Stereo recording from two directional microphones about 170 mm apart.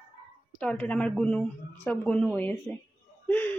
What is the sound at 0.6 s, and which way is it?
A woman's voice, 5° left (ahead or behind).